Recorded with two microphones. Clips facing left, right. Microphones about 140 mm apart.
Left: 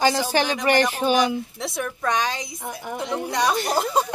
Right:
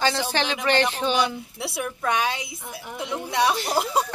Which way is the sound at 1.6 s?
5° right (ahead or behind).